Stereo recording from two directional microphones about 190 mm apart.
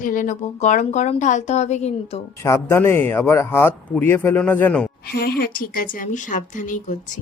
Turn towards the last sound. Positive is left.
turn(degrees=40)  # may be behind; listen again after turning